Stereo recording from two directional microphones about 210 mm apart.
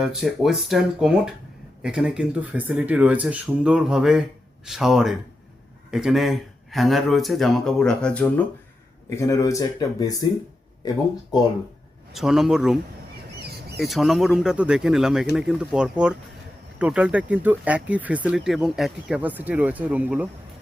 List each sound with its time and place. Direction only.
0.0 s speech: centre (ahead or behind); by 11.4 s 20° left (ahead or behind)
12.1 s speech: centre (ahead or behind)